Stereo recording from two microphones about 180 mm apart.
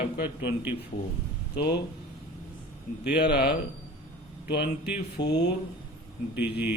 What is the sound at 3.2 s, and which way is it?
Speech, 65° left (ahead or behind).